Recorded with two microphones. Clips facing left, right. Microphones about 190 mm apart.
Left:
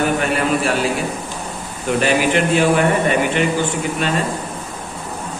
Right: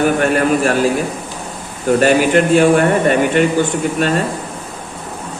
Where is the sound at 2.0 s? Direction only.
45° right (ahead or behind).